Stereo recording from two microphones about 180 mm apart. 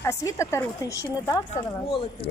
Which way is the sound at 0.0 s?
15° left (ahead or behind).